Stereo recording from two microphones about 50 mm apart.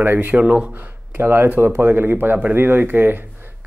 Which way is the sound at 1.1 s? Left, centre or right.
Right.